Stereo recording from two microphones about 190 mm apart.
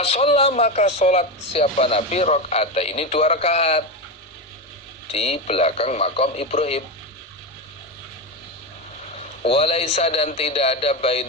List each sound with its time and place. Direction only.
0.0 s speech: 30° left (ahead or behind)
5.1 s speech: 30° left (ahead or behind)
9.4 s speech: 30° left (ahead or behind)